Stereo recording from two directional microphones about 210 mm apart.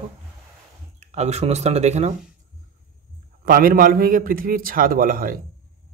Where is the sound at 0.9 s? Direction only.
30° right (ahead or behind).